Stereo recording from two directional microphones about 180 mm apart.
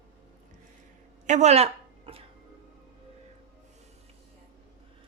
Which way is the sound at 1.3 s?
40° right (ahead or behind).